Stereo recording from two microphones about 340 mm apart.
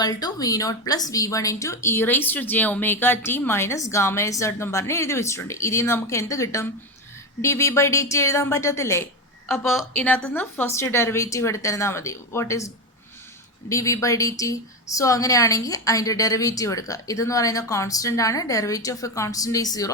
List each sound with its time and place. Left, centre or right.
0.0 s a woman's voice: centre